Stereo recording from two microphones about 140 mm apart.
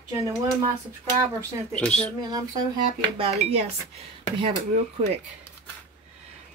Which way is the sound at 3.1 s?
45° right (ahead or behind).